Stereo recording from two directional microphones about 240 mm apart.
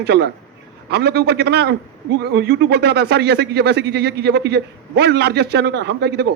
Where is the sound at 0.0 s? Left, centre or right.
Right.